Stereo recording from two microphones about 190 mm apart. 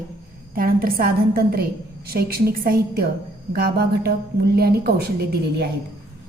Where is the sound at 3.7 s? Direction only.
55° right (ahead or behind).